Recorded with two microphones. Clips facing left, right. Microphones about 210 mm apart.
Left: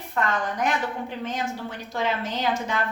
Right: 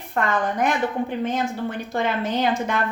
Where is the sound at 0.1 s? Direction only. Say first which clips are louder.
Right 3 dB; 55° right (ahead or behind).